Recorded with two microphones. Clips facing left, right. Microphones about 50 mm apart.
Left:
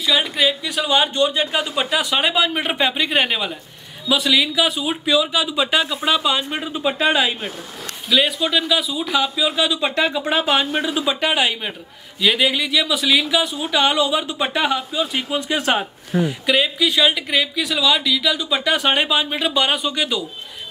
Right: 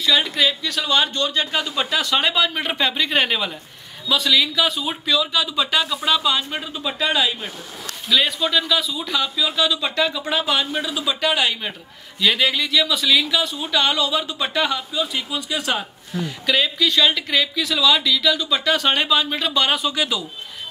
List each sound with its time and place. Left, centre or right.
0.0 s a woman's voice: centre; by 7.3 s left
8.1 s a woman's voice: centre
9.8 s speech: left
12.2 s a woman's voice: centre
15.2 s a woman's voice: left; by 20.2 s centre